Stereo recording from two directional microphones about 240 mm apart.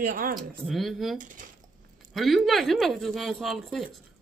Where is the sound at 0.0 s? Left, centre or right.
Right.